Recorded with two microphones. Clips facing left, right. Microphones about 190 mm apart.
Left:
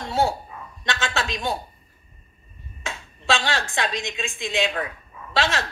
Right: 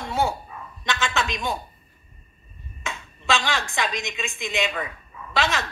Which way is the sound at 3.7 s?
30° left (ahead or behind).